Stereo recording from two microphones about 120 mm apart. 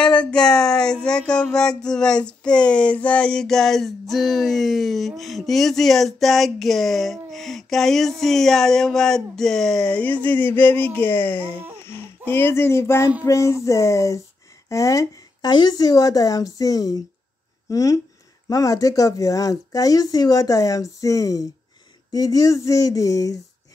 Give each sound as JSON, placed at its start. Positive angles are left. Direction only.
{"t": 0.0, "sound": "speech", "side_deg": 10}
{"t": 11.8, "sound": "baby cry", "side_deg": 20}
{"t": 12.3, "sound": "speech", "side_deg": 15}